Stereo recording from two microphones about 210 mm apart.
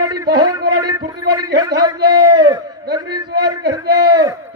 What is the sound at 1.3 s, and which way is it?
Speech, 20° right (ahead or behind).